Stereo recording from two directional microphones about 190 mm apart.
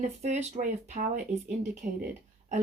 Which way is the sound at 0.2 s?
40° right (ahead or behind).